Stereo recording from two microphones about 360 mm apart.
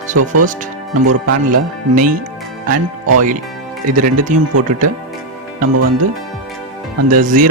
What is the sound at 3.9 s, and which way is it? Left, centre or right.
Speech, right.